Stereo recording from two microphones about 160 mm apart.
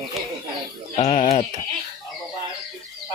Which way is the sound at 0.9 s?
40° left (ahead or behind).